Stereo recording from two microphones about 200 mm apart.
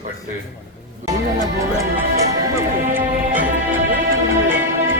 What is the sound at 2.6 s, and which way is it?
Music, 10° right (ahead or behind).